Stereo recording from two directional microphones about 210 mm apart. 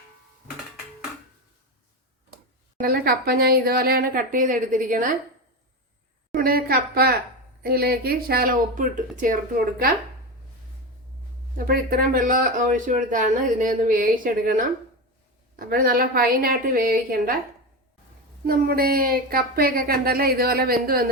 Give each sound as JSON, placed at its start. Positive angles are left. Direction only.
{"t": 2.8, "sound": "a woman's voice", "side_deg": -45}
{"t": 6.3, "sound": "a woman's voice", "side_deg": -45}
{"t": 11.5, "sound": "a woman's voice", "side_deg": -45}
{"t": 18.4, "sound": "a woman's voice", "side_deg": -45}